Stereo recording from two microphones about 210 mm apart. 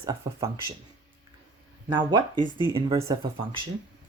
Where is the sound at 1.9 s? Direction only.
20° right (ahead or behind).